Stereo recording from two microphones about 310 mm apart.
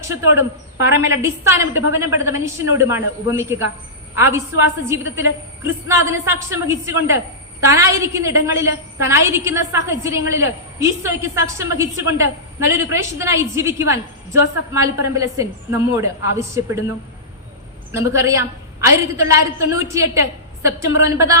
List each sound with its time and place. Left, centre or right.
0.3 s a woman's voice: centre
5.9 s a woman's voice: centre
17.9 s a woman's voice: centre